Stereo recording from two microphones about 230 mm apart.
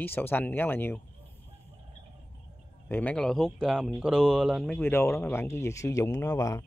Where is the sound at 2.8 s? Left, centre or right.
Centre.